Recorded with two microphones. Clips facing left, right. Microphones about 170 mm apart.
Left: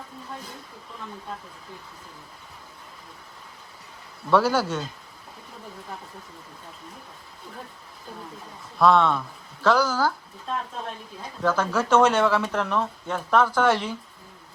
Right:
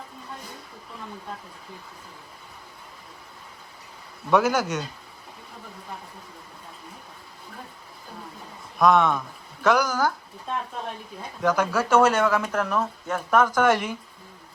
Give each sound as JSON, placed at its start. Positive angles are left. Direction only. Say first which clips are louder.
{"t": 4.3, "sound": "speech", "louder": "even", "side_deg": -15}
{"t": 8.8, "sound": "speech", "louder": "even", "side_deg": -10}
{"t": 11.4, "sound": "speech", "louder": "right 1 dB", "side_deg": -15}